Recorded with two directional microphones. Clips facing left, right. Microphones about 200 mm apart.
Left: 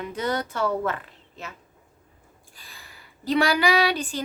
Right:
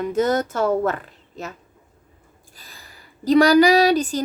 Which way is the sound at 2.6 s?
40° right (ahead or behind).